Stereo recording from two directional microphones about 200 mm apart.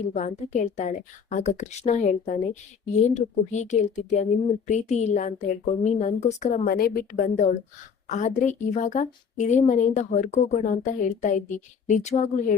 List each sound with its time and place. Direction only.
0.1 s a woman's voice: 35° left (ahead or behind)
6.7 s a woman's voice: 50° left (ahead or behind)